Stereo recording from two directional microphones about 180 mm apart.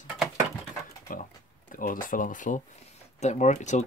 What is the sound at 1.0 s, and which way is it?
Speech, 45° left (ahead or behind).